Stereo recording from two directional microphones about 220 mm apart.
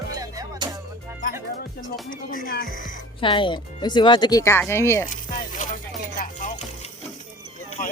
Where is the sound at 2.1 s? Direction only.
40° left (ahead or behind).